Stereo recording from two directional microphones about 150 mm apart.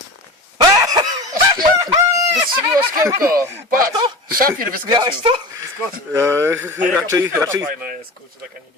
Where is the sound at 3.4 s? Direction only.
15° right (ahead or behind).